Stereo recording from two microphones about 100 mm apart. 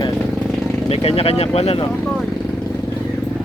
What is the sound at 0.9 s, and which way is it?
Speech, 75° left (ahead or behind).